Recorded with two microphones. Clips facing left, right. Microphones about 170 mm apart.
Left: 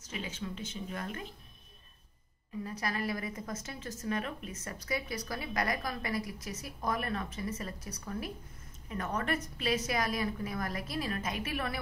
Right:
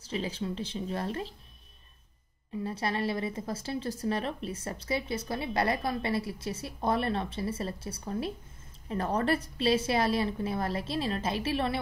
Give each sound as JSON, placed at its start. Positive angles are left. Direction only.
{"t": 0.0, "sound": "speech", "side_deg": -35}
{"t": 2.6, "sound": "a woman's voice", "side_deg": -30}